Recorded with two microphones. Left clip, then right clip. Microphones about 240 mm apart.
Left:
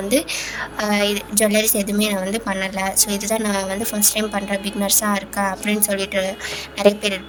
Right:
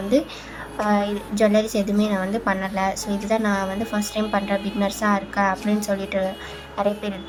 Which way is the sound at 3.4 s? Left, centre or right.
Left.